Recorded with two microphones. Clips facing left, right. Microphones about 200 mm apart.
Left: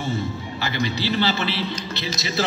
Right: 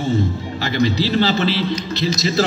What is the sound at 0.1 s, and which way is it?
Music, 35° right (ahead or behind).